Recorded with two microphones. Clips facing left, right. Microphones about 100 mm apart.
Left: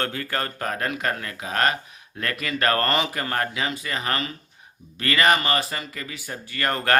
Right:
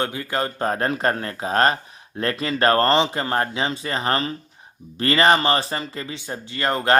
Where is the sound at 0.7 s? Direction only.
35° right (ahead or behind).